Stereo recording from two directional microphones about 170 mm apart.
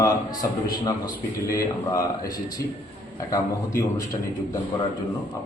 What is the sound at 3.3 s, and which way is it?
Speech, 20° left (ahead or behind).